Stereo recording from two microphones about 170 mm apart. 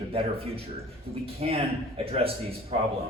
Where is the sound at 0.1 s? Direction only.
35° right (ahead or behind).